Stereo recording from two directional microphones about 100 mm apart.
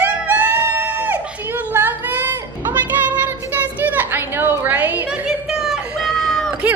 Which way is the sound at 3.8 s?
20° right (ahead or behind).